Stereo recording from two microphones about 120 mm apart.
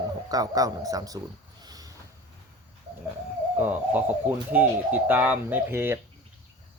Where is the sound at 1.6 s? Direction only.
30° right (ahead or behind).